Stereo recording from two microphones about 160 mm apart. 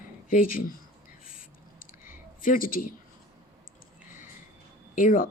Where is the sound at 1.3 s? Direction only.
60° left (ahead or behind).